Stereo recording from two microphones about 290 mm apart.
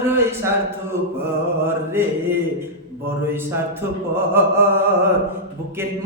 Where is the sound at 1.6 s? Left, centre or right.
Centre.